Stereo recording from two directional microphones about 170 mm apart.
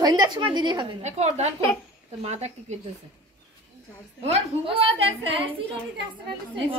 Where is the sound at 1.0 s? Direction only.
40° right (ahead or behind).